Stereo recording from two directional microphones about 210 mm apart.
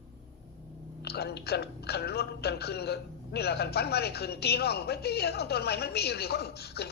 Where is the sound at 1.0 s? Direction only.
50° left (ahead or behind).